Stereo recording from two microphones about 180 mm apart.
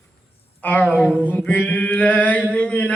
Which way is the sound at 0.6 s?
10° left (ahead or behind).